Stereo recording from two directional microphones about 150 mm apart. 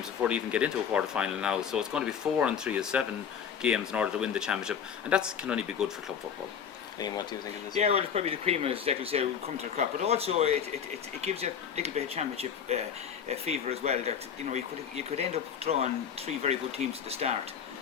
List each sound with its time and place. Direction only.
0.2 s speech: 10° right (ahead or behind)
7.0 s speech: 30° left (ahead or behind)
7.8 s speech: 45° right (ahead or behind)